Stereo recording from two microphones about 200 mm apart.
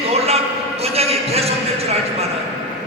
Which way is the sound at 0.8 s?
30° right (ahead or behind).